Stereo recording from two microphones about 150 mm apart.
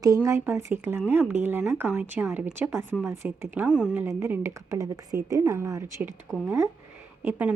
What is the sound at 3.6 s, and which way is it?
A woman's voice, 5° right (ahead or behind).